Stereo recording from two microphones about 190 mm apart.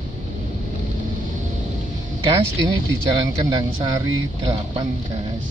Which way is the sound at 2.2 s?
25° right (ahead or behind).